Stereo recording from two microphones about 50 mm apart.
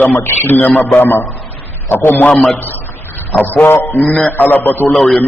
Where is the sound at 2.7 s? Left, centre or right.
Left.